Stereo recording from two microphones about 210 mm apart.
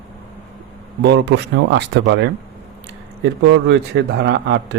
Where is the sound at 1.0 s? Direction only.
55° right (ahead or behind).